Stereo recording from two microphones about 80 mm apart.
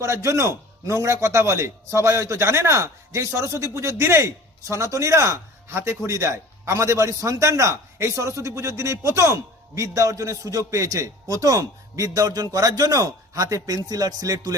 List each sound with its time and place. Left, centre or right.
0.0 s a man's voice: right